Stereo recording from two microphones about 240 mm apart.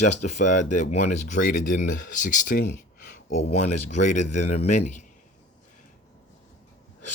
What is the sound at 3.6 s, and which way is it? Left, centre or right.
Speech, left.